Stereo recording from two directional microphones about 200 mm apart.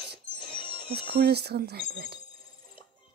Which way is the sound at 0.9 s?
55° right (ahead or behind).